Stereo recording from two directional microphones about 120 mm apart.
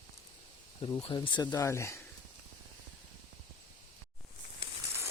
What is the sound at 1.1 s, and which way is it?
Speech, 40° left (ahead or behind).